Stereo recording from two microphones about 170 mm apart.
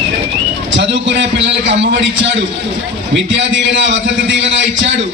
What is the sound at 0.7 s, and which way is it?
A man's voice, 90° right.